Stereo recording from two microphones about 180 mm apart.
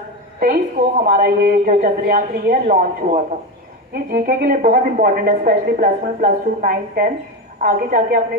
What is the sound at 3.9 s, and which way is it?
Speech, 60° right (ahead or behind).